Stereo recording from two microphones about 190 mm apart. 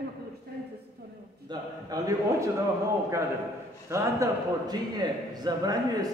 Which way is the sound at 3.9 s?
20° right (ahead or behind).